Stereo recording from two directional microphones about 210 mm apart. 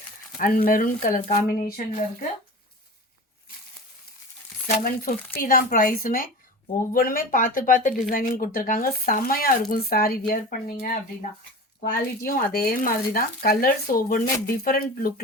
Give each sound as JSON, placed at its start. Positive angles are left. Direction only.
{"t": 0.3, "sound": "speech", "side_deg": 40}
{"t": 4.8, "sound": "speech", "side_deg": 45}
{"t": 14.3, "sound": "speech", "side_deg": 15}
{"t": 14.6, "sound": "speech", "side_deg": 45}